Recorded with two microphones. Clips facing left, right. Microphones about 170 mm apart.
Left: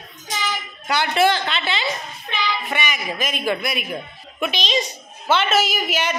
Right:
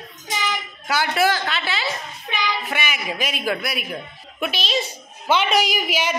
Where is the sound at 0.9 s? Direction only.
5° right (ahead or behind).